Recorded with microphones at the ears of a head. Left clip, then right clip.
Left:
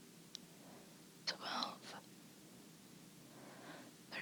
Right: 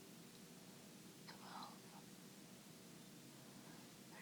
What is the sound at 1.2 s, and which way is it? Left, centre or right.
Whispering, left.